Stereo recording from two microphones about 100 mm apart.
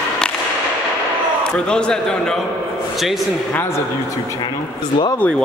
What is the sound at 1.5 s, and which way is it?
Speech, 10° left (ahead or behind).